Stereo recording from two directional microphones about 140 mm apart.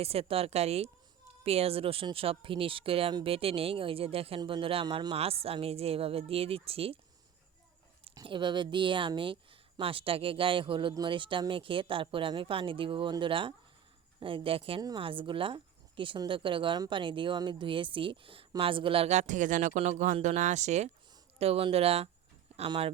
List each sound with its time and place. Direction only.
0.0 s speech: 45° right (ahead or behind)
8.1 s speech: 35° right (ahead or behind)
14.8 s speech: 25° right (ahead or behind)
15.0 s speech: 40° right (ahead or behind)